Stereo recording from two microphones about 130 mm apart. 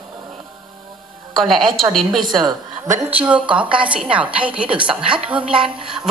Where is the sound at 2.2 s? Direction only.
35° right (ahead or behind).